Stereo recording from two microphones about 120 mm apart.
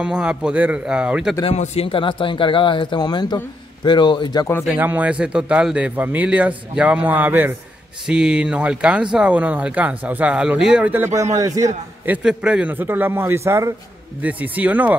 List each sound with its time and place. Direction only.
0.0 s speech: 10° right (ahead or behind)
1.4 s a man's voice: 60° left (ahead or behind); by 4.5 s 40° left (ahead or behind)
4.7 s speech: 15° right (ahead or behind)
11.3 s a man's voice: 30° right (ahead or behind)
12.1 s speech: 5° right (ahead or behind); by 13.7 s 25° right (ahead or behind)
14.2 s speech: 10° right (ahead or behind)